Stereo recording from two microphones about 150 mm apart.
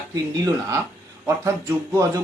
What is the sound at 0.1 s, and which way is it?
Speech, 25° right (ahead or behind).